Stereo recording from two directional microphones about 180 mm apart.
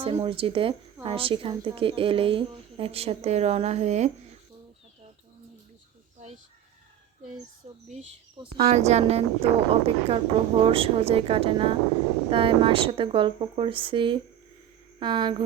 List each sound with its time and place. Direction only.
0.0 s a woman's voice: 30° right (ahead or behind)
8.5 s a woman's voice: 35° right (ahead or behind)